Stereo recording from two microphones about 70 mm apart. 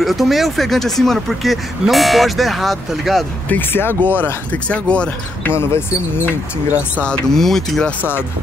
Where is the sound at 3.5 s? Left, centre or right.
Left.